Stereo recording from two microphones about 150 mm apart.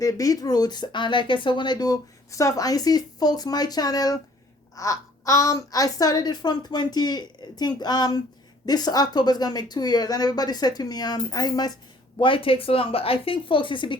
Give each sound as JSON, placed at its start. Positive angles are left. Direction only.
{"t": 0.0, "sound": "a woman's voice", "side_deg": 25}